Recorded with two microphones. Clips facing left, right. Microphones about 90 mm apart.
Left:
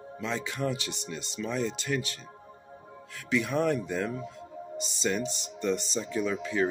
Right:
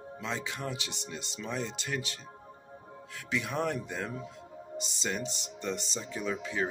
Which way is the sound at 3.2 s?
15° right (ahead or behind).